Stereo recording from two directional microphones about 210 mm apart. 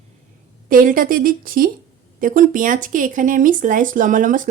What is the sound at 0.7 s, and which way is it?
Speech, 40° right (ahead or behind).